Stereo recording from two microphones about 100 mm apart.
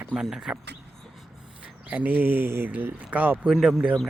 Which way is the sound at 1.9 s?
15° right (ahead or behind).